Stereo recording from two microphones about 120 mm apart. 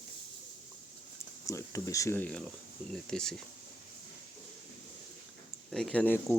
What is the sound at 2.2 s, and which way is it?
Speech, 10° left (ahead or behind).